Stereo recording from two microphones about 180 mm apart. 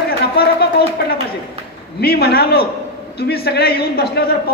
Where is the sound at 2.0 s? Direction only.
60° left (ahead or behind).